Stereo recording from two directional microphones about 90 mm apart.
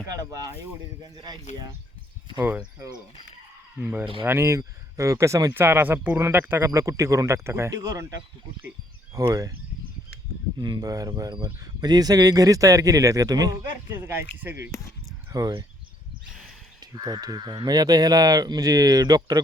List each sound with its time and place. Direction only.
0.1 s speech: 40° right (ahead or behind)
2.4 s speech: 20° right (ahead or behind)
4.2 s speech: 30° right (ahead or behind)
6.6 s speech: 35° right (ahead or behind)
7.8 s speech: 40° right (ahead or behind)
9.1 s speech: 40° right (ahead or behind)
10.6 s speech: 50° right (ahead or behind)
13.9 s speech: 25° right (ahead or behind)
15.3 s speech: 45° right (ahead or behind)
16.8 s speech: 50° right (ahead or behind)